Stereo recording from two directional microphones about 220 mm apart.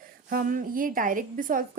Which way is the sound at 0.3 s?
40° right (ahead or behind).